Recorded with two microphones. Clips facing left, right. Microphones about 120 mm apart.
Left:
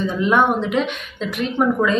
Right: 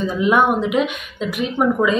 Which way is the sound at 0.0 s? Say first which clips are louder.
Right 1 dB; 5° right (ahead or behind).